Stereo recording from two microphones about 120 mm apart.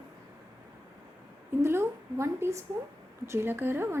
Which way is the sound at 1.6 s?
20° right (ahead or behind).